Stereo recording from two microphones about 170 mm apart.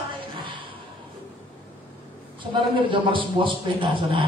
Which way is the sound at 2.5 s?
30° right (ahead or behind).